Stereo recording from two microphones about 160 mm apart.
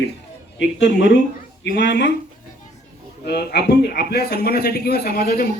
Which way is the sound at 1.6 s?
70° left (ahead or behind).